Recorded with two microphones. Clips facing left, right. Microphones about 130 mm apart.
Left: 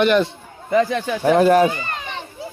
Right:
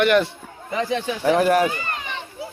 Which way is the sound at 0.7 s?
55° left (ahead or behind).